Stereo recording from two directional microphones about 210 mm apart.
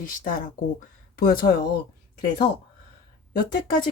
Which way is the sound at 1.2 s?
45° left (ahead or behind).